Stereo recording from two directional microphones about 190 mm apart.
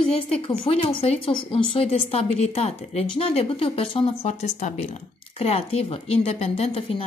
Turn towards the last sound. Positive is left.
turn(degrees=30)  # may be behind; listen again after turning